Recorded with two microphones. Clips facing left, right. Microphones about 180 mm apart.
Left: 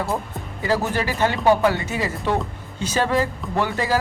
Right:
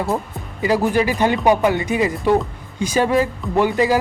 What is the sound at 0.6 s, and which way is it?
Speech, 15° right (ahead or behind).